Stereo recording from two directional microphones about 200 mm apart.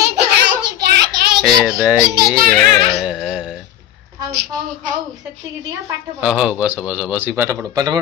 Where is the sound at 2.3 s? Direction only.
45° right (ahead or behind).